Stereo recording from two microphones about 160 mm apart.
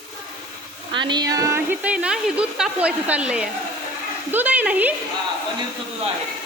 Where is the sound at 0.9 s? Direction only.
30° right (ahead or behind); by 4.9 s 10° right (ahead or behind).